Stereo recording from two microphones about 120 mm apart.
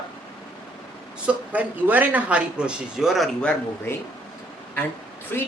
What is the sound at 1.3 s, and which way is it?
A man's voice, 15° right (ahead or behind).